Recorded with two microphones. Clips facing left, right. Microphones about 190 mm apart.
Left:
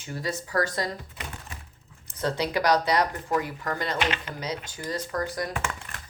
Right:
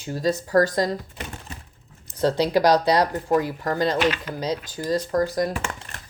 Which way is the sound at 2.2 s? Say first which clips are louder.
Right 7 dB; 35° right (ahead or behind).